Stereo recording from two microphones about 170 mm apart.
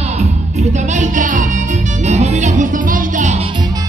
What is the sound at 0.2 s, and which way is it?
Music, 45° right (ahead or behind).